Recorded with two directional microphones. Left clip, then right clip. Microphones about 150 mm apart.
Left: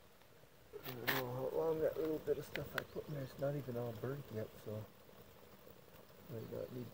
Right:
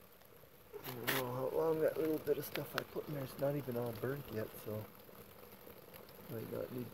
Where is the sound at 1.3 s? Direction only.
15° right (ahead or behind).